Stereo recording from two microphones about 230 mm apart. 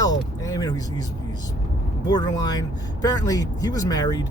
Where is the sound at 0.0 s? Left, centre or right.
Centre.